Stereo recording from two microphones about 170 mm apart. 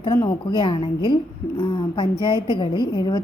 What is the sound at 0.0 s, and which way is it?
A woman's voice, 20° left (ahead or behind).